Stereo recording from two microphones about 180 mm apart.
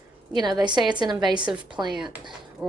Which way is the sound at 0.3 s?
25° right (ahead or behind).